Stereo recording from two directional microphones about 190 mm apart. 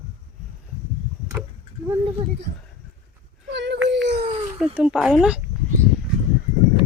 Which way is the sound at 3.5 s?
65° right (ahead or behind).